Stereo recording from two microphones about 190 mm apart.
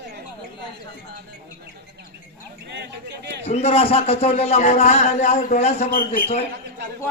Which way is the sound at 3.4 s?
35° left (ahead or behind).